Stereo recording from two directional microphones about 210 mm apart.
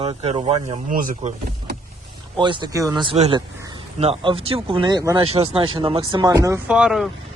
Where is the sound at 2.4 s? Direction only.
20° right (ahead or behind).